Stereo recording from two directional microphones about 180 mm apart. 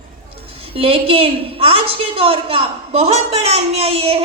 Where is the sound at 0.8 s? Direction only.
30° right (ahead or behind).